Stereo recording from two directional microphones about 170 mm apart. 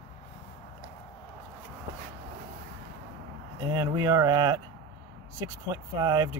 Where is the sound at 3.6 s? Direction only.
20° right (ahead or behind).